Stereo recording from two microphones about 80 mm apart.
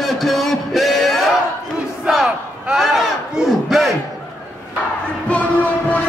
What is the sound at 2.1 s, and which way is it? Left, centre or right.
Battle cry, centre.